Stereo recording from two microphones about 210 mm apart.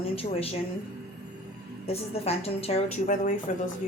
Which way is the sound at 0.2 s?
30° left (ahead or behind).